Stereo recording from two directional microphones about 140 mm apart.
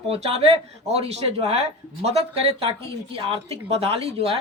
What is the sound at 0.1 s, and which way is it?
Speech, 50° right (ahead or behind).